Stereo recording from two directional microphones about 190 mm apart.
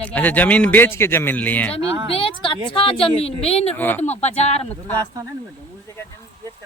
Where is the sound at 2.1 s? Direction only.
30° left (ahead or behind).